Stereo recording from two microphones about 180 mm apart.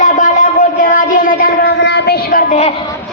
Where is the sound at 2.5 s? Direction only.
35° left (ahead or behind).